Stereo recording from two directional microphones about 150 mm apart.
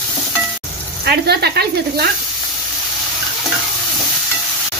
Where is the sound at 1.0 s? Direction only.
90° right.